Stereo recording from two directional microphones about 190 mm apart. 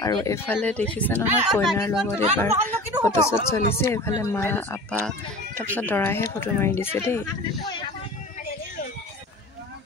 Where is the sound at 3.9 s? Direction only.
15° left (ahead or behind).